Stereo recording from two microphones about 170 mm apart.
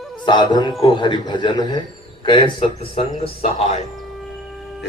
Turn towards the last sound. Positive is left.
turn(degrees=40)  # may be behind; listen again after turning